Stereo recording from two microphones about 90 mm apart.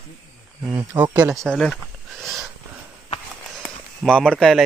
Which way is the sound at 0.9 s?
15° right (ahead or behind).